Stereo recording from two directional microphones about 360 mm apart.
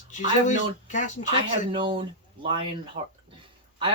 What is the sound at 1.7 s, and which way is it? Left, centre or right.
Speech, centre.